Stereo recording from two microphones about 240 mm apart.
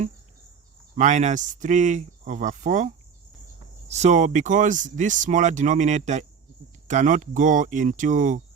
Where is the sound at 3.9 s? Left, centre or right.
Right.